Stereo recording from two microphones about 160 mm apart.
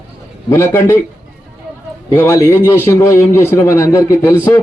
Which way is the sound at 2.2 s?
20° left (ahead or behind).